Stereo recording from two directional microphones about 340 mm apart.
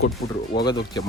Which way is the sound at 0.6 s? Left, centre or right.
Centre.